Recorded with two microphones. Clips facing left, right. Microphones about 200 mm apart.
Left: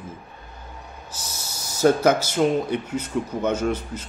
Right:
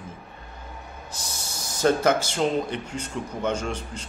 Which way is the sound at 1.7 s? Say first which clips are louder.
Left 3 dB; 10° left (ahead or behind).